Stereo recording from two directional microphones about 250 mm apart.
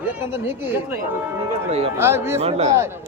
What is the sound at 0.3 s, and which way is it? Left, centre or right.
Speech, centre.